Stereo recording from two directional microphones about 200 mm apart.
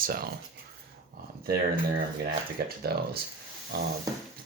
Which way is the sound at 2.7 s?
50° right (ahead or behind).